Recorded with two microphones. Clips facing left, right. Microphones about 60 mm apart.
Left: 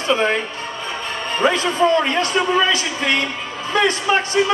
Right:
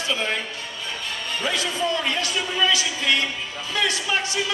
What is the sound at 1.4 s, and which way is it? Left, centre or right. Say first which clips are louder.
Speech: left 9 dB; left.